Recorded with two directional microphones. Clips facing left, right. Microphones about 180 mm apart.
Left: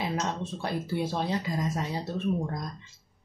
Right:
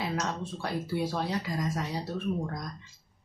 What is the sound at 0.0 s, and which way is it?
Speech, 20° left (ahead or behind).